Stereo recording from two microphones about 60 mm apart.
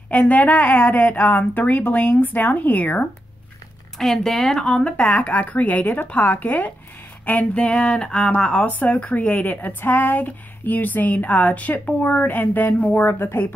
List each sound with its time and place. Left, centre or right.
0.1 s speech: left
4.0 s speech: centre
8.6 s speech: left
13.0 s speech: left